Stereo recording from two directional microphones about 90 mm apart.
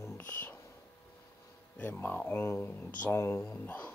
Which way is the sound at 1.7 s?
15° left (ahead or behind).